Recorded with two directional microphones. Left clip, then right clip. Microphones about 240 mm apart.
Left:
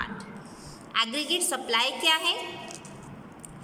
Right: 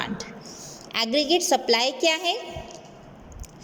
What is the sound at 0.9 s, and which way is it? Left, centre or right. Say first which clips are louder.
A woman's voice: right 4 dB; centre.